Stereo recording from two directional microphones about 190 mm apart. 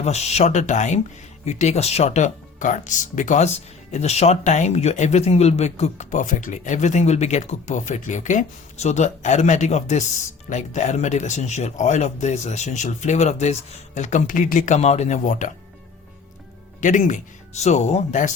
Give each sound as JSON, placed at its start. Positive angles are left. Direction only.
{"t": 0.0, "sound": "speech", "side_deg": 35}
{"t": 16.8, "sound": "speech", "side_deg": 40}